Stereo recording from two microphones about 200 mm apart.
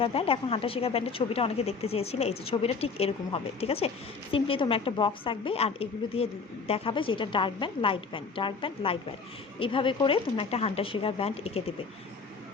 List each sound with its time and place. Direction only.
0.0 s a woman's voice: 30° left (ahead or behind)